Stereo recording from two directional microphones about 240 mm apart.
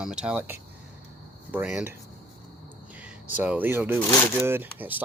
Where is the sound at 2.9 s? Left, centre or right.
Centre.